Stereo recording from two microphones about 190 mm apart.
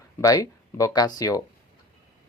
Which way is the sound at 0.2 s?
15° left (ahead or behind).